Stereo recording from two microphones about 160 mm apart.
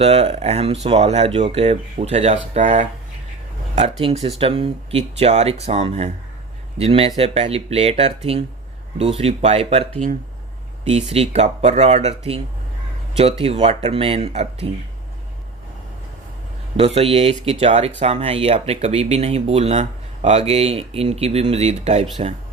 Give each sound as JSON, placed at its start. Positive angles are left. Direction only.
{"t": 0.0, "sound": "speech", "side_deg": -40}
{"t": 4.0, "sound": "speech", "side_deg": -40}
{"t": 10.8, "sound": "speech", "side_deg": -40}
{"t": 13.4, "sound": "speech", "side_deg": -40}
{"t": 16.7, "sound": "speech", "side_deg": -40}